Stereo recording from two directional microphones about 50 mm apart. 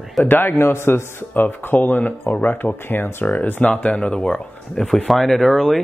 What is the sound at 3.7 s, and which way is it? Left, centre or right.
Speech, left.